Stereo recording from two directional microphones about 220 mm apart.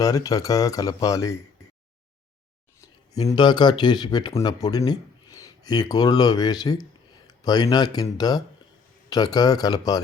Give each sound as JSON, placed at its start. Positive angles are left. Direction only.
{"t": 0.0, "sound": "speech", "side_deg": 15}
{"t": 3.1, "sound": "speech", "side_deg": 15}